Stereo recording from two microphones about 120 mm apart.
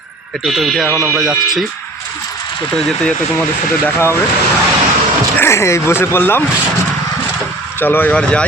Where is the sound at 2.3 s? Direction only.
40° left (ahead or behind).